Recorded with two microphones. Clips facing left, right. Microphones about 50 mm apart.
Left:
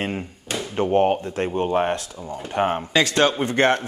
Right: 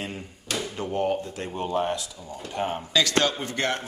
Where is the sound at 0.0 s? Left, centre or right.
Left.